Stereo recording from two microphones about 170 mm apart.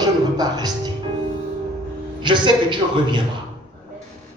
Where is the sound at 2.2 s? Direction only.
25° right (ahead or behind).